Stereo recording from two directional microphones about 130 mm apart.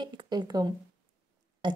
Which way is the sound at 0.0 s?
35° right (ahead or behind).